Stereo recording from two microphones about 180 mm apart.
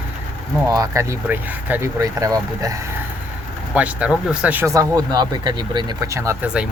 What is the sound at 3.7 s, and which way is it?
Speech, 5° right (ahead or behind).